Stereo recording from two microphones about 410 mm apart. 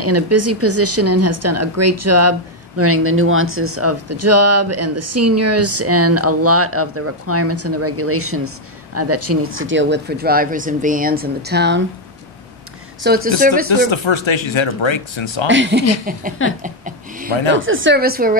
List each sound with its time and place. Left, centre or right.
0.0 s speech: right
13.0 s speech: right
13.7 s speech: left
15.4 s speech: right
16.6 s a sound: centre
17.5 s speech: right